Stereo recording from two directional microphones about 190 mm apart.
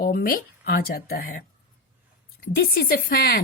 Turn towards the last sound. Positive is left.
turn(degrees=50)  # may be behind; listen again after turning